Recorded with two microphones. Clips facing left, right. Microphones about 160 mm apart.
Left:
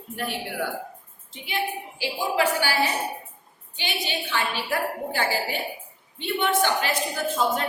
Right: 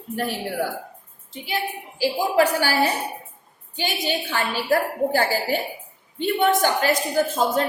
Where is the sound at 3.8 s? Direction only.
40° right (ahead or behind).